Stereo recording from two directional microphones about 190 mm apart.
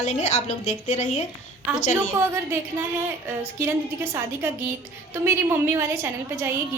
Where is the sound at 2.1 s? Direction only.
15° right (ahead or behind).